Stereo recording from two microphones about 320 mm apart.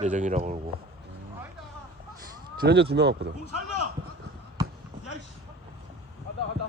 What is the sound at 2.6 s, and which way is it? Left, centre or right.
Speech, right.